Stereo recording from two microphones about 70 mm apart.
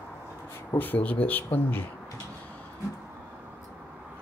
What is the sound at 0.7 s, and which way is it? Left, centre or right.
Speech, left.